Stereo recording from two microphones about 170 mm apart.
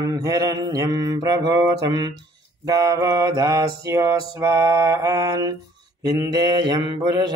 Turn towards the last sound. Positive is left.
turn(degrees=-25)  # may be behind; listen again after turning